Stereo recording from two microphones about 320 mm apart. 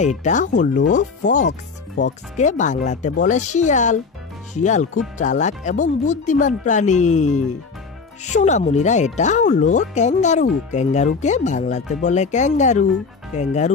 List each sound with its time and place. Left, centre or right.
0.0 s speech: left